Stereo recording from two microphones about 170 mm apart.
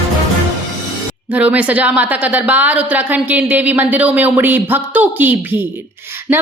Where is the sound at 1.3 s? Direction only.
10° right (ahead or behind).